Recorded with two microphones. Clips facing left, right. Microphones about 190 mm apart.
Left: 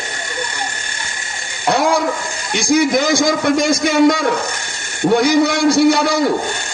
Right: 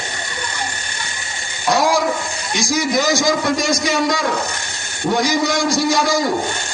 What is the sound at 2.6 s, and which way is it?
A man's voice, 55° left (ahead or behind).